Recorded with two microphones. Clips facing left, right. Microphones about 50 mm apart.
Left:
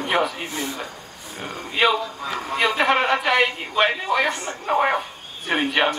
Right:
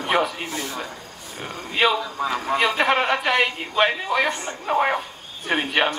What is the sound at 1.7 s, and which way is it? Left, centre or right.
A man's voice, centre.